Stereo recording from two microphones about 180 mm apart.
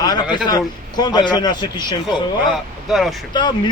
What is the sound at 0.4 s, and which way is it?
Speech, 20° left (ahead or behind).